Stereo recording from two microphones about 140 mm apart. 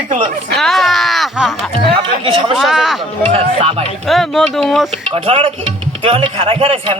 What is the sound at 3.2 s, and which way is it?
Speech, 40° right (ahead or behind).